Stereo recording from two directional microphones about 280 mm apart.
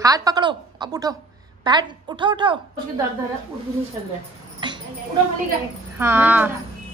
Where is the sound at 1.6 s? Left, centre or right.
Centre.